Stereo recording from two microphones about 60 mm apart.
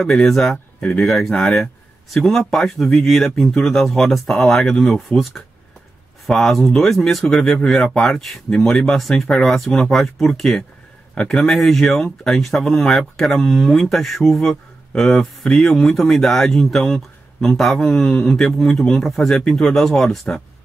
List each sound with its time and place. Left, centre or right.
0.0 s speech: centre
0.7 s speech: centre
1.0 s speech: centre
15.7 s speech: centre